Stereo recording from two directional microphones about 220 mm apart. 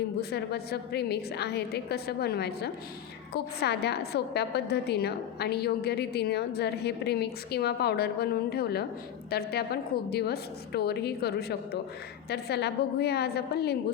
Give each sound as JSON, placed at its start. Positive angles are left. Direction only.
{"t": 0.2, "sound": "a woman's voice", "side_deg": 45}